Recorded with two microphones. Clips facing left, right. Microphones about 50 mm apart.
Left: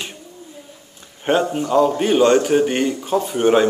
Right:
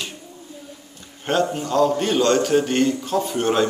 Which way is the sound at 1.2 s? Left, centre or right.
Centre.